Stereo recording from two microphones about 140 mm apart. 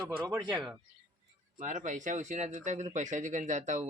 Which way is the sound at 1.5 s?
60° right (ahead or behind).